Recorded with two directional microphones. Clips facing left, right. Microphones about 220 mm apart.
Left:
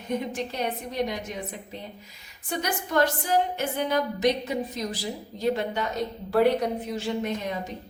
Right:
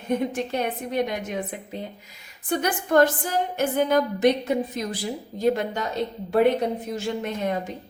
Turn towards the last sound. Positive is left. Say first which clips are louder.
# right 2 dB
turn(degrees=-50)  # may be behind; listen again after turning